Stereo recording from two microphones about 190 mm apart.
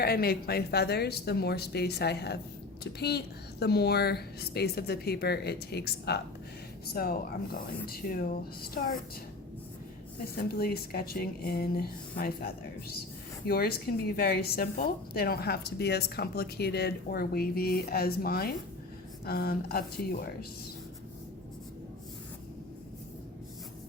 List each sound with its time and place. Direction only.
0.0 s speech: 55° left (ahead or behind)
10.5 s speech: 55° left (ahead or behind)